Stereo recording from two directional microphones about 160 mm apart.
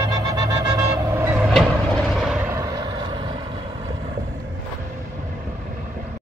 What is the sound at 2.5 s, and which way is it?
Vehicle, 20° right (ahead or behind).